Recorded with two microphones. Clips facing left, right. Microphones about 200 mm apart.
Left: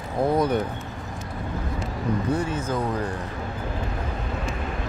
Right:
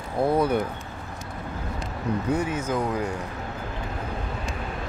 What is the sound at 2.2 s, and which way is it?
Speech, 15° right (ahead or behind).